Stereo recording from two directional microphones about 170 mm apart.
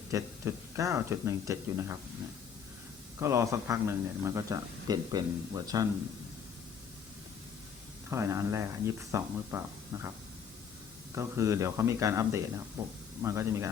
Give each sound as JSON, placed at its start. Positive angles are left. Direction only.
{"t": 0.1, "sound": "speech", "side_deg": -20}
{"t": 3.2, "sound": "speech", "side_deg": -15}
{"t": 8.1, "sound": "speech", "side_deg": -15}
{"t": 11.1, "sound": "speech", "side_deg": -15}